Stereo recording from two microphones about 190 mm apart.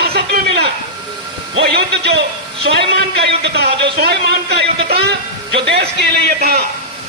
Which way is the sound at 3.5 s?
60° right (ahead or behind).